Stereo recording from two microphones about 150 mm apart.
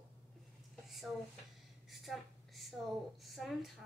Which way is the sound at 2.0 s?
Centre (ahead or behind).